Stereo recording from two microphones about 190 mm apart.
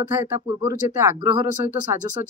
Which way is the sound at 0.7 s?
15° right (ahead or behind).